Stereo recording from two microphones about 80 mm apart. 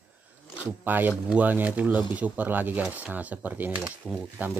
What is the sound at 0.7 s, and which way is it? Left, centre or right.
Speech, right.